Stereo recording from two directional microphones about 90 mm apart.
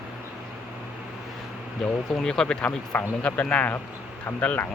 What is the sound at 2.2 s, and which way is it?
Speech, 5° left (ahead or behind).